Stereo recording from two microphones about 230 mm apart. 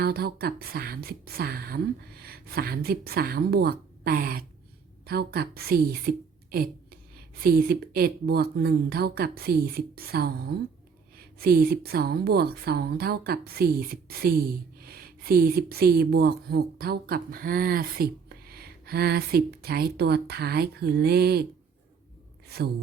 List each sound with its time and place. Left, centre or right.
0.0 s speech: right
22.4 s a woman's voice: right